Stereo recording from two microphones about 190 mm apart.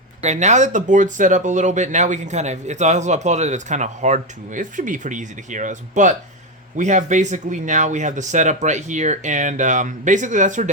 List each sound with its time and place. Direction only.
0.2 s speech: 35° right (ahead or behind)